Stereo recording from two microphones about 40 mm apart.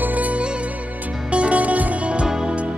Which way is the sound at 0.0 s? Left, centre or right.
Right.